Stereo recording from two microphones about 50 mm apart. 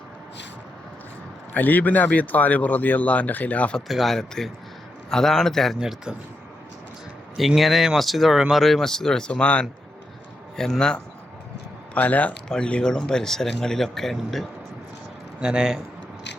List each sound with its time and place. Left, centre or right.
1.5 s speech: left
3.8 s speech: centre
4.1 s speech: centre
5.8 s a man's voice: centre
7.3 s speech: centre; by 9.6 s left
10.6 s speech: centre
11.9 s speech: left
12.5 s speech: centre
15.4 s a man's voice: centre